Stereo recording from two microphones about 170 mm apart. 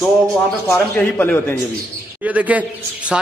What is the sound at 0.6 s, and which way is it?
Speech, 10° left (ahead or behind).